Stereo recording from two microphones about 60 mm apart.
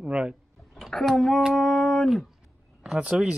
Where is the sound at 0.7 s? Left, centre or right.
Centre.